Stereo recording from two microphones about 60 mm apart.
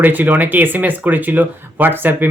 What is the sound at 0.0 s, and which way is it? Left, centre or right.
Speech, right.